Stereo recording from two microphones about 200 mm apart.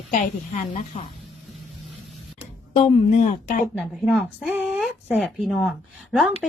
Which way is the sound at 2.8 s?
30° left (ahead or behind).